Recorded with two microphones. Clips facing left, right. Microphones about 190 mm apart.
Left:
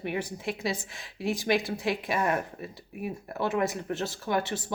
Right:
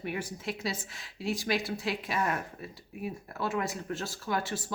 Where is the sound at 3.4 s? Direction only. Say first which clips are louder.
Left 4 dB; 20° left (ahead or behind).